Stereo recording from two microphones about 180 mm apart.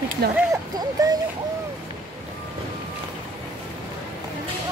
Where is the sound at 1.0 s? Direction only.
20° right (ahead or behind).